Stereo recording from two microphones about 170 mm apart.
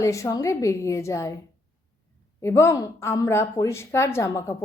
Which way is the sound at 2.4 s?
15° left (ahead or behind).